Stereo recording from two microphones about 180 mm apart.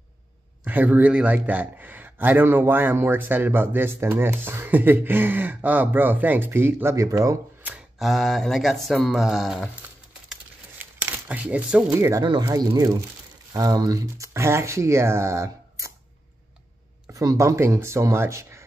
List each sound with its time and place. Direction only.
0.7 s a man's voice: 10° right (ahead or behind)
11.0 s a man's voice: 10° right (ahead or behind)
17.1 s a man's voice: 20° right (ahead or behind)